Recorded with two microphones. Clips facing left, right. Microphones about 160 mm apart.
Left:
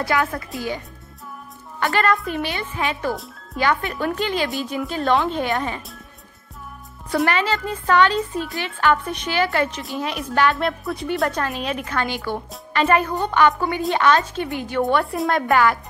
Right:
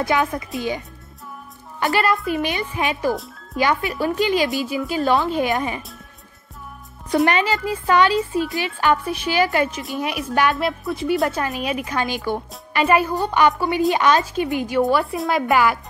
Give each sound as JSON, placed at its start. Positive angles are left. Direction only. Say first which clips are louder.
{"t": 0.0, "sound": "speech", "louder": "right 2 dB", "side_deg": -20}
{"t": 1.8, "sound": "a woman's voice", "louder": "right 1 dB", "side_deg": -20}
{"t": 2.0, "sound": "a woman's voice", "louder": "right 1 dB", "side_deg": -5}
{"t": 2.4, "sound": "a woman's voice", "louder": "right 2 dB", "side_deg": -15}
{"t": 4.5, "sound": "a woman's voice", "louder": "right 2 dB", "side_deg": 0}
{"t": 7.2, "sound": "speech", "louder": "right 2 dB", "side_deg": -15}
{"t": 10.7, "sound": "speech", "louder": "right 3 dB", "side_deg": 0}
{"t": 14.8, "sound": "a woman's voice", "louder": "even", "side_deg": 0}